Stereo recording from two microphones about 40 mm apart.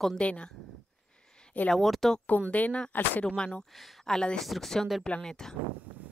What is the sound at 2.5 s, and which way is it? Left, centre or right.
Speech, left.